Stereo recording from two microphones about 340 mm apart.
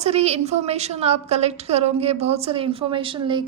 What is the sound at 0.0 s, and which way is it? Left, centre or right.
A woman's voice, centre.